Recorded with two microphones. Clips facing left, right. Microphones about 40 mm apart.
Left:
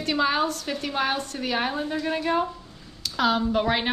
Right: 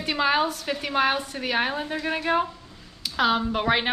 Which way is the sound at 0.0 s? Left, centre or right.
Centre.